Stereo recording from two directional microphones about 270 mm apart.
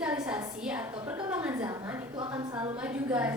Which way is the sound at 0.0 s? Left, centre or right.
Centre.